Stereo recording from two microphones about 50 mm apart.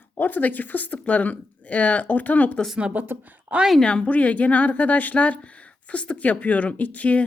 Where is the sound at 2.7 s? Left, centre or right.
Right.